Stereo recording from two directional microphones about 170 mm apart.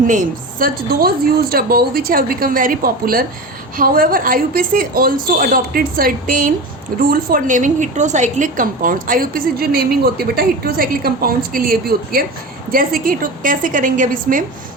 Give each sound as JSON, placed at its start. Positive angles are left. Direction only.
{"t": 0.1, "sound": "a woman's voice", "side_deg": -55}